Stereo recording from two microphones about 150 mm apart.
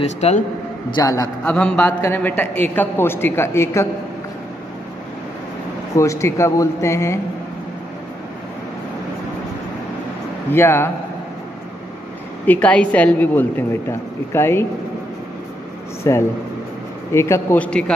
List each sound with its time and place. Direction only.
0.2 s a man's voice: 45° left (ahead or behind)
0.9 s speech: 25° left (ahead or behind)
1.4 s a woman's voice: 5° left (ahead or behind)
5.9 s speech: 20° left (ahead or behind)
10.5 s a woman's voice: 15° left (ahead or behind)
12.4 s a woman's voice: 10° left (ahead or behind)
16.0 s a woman's voice: 20° left (ahead or behind)